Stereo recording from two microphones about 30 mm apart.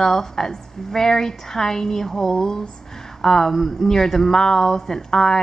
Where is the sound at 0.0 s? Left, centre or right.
Centre.